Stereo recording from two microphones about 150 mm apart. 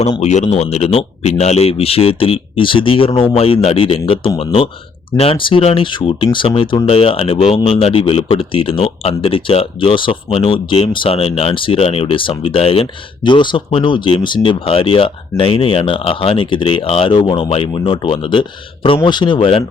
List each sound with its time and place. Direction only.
0.2 s speech: 50° left (ahead or behind)